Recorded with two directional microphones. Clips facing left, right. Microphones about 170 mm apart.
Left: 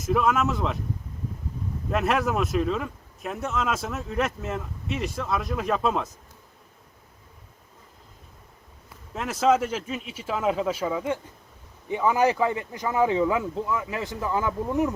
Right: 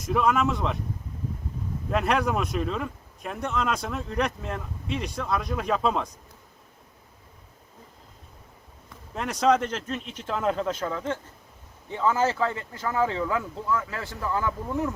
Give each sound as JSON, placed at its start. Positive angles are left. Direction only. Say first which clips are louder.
{"t": 0.0, "sound": "speech", "louder": "even", "side_deg": 0}
{"t": 1.9, "sound": "speech", "louder": "even", "side_deg": 0}
{"t": 9.1, "sound": "speech", "louder": "left 1 dB", "side_deg": 0}